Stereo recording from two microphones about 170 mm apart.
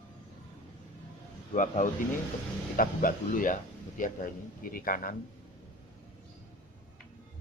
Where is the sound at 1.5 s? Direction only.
50° left (ahead or behind).